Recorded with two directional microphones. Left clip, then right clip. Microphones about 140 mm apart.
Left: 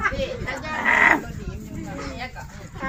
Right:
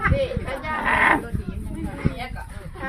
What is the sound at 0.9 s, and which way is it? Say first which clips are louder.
Livestock: left 2 dB; 25° right (ahead or behind).